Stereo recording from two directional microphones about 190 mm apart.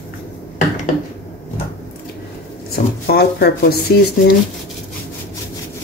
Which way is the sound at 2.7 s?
55° left (ahead or behind).